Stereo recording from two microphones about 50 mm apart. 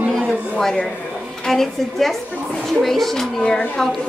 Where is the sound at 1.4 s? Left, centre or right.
Centre.